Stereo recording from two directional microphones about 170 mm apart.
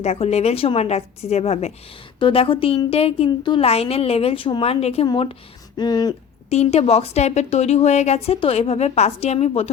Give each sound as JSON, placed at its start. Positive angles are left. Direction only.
{"t": 0.0, "sound": "a woman's voice", "side_deg": 40}
{"t": 6.5, "sound": "a woman's voice", "side_deg": 40}